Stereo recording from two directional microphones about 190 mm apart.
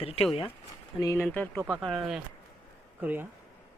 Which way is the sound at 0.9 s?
15° left (ahead or behind).